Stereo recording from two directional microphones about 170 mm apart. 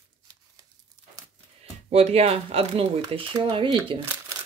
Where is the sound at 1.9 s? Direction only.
35° right (ahead or behind).